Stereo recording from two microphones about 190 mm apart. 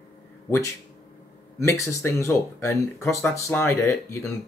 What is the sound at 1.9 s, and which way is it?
Speech, 15° left (ahead or behind).